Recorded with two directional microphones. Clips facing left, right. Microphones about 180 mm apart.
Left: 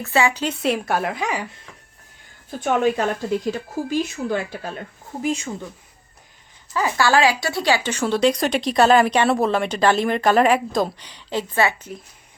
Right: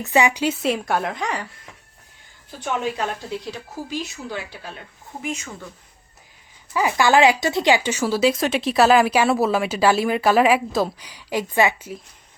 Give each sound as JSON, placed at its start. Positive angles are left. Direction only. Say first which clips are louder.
{"t": 0.0, "sound": "a woman's voice", "louder": "right 1 dB", "side_deg": -15}
{"t": 2.6, "sound": "a woman's voice", "louder": "left 5 dB", "side_deg": 50}
{"t": 5.2, "sound": "speech", "louder": "left 6 dB", "side_deg": 30}
{"t": 6.7, "sound": "speech", "louder": "right 2 dB", "side_deg": -15}